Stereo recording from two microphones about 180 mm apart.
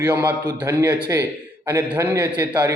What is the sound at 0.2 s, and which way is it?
A man's voice, 15° right (ahead or behind).